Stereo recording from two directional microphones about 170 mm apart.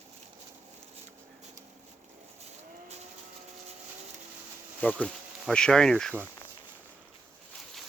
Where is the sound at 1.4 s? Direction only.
45° right (ahead or behind).